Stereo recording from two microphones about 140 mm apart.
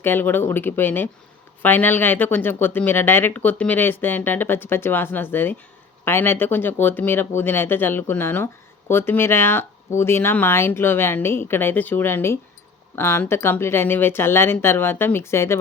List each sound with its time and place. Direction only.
0.0 s speech: 15° left (ahead or behind)